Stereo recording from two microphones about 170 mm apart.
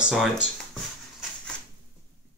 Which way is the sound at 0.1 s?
5° right (ahead or behind).